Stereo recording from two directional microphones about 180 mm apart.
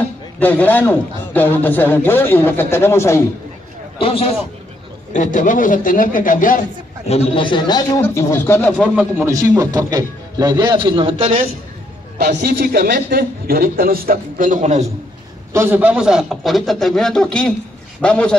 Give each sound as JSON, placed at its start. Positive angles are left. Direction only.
{"t": 0.4, "sound": "a man's voice", "side_deg": 10}
{"t": 4.0, "sound": "a man's voice", "side_deg": 30}
{"t": 5.1, "sound": "a man's voice", "side_deg": 45}
{"t": 7.1, "sound": "a man's voice", "side_deg": 35}
{"t": 8.8, "sound": "a man's voice", "side_deg": -5}
{"t": 9.3, "sound": "speech", "side_deg": -15}
{"t": 12.2, "sound": "a man's voice", "side_deg": -65}
{"t": 15.5, "sound": "a man's voice", "side_deg": -10}